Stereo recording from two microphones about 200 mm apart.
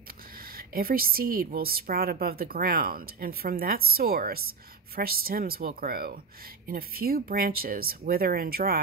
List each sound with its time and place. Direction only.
0.7 s a woman's voice: 50° right (ahead or behind)